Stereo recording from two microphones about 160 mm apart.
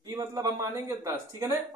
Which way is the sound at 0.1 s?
20° right (ahead or behind).